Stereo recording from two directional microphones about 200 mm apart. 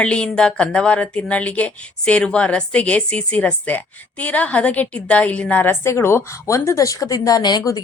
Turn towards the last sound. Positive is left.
turn(degrees=20)  # may be behind; listen again after turning